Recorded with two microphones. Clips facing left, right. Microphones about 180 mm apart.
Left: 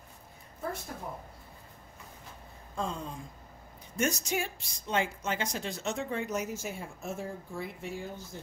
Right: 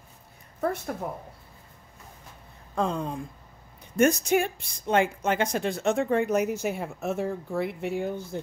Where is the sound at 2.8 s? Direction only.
65° right (ahead or behind).